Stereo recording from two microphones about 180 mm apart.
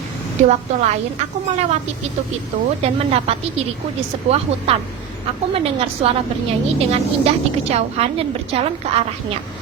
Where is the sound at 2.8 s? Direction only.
35° right (ahead or behind).